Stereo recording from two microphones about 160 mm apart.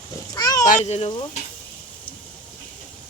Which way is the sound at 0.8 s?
40° left (ahead or behind).